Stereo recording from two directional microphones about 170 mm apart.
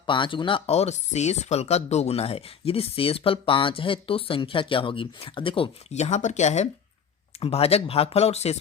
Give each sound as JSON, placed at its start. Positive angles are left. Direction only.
{"t": 0.0, "sound": "speech", "side_deg": 30}